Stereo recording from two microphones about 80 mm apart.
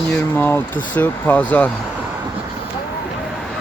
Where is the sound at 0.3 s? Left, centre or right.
Left.